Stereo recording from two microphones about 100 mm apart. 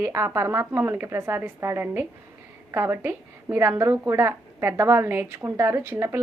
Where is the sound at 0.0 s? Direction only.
25° right (ahead or behind).